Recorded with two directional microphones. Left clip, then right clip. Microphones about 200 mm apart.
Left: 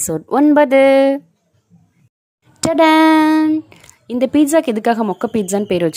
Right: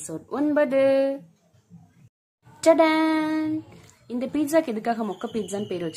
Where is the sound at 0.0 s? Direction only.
45° left (ahead or behind).